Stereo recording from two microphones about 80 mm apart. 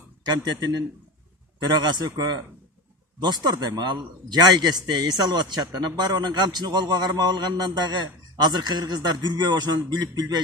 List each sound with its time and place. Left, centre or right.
0.2 s a man's voice: right
1.7 s a man's voice: right